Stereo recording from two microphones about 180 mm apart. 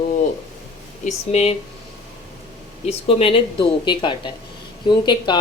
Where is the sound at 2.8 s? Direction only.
35° left (ahead or behind).